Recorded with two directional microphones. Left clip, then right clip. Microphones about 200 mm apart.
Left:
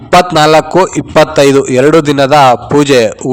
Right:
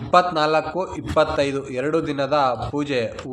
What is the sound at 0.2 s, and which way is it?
A man's voice, 60° left (ahead or behind).